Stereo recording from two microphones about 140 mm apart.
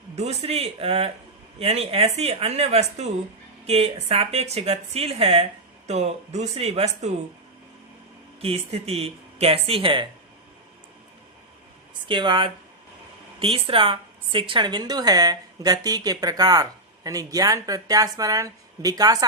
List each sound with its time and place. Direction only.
0.2 s a woman's voice: 50° right (ahead or behind)
8.4 s a woman's voice: 45° right (ahead or behind)
12.0 s a woman's voice: 35° right (ahead or behind)